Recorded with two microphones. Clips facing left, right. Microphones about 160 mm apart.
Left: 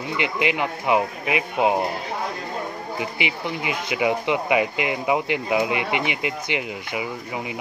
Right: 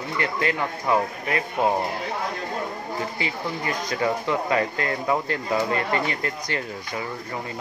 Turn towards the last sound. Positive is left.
turn(degrees=10)  # may be behind; listen again after turning